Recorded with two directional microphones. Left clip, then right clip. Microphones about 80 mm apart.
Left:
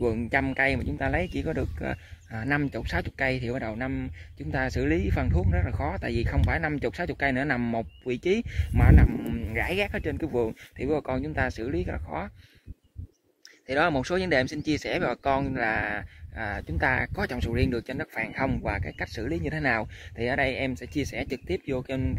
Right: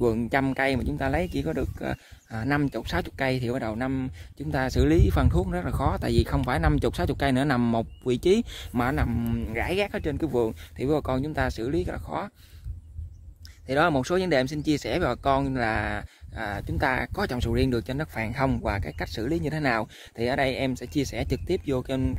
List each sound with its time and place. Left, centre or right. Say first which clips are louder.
0.0 s speech: right 2 dB; right
0.9 s speech: right 1 dB; right
1.4 s speech: right 1 dB; centre
2.4 s speech: right 1 dB; right
9.2 s speech: even; right
13.7 s speech: right 2 dB; right